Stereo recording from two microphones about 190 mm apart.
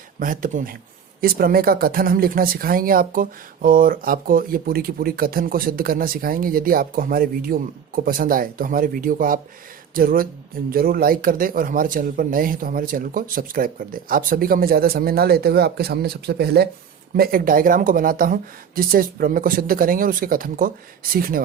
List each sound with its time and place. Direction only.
0.2 s speech: 45° right (ahead or behind)